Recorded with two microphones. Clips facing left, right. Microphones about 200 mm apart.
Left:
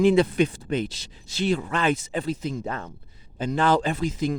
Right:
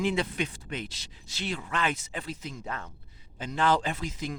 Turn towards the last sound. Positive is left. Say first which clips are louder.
# left 8 dB
turn(degrees=35)  # may be behind; listen again after turning